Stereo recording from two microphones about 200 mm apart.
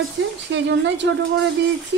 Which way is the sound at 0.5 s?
60° right (ahead or behind).